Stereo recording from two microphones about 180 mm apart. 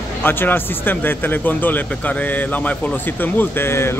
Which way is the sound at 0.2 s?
10° left (ahead or behind).